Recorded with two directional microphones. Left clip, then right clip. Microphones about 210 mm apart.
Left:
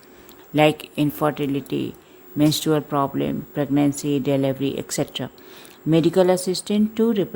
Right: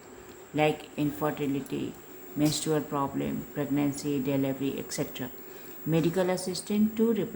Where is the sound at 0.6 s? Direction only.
50° left (ahead or behind).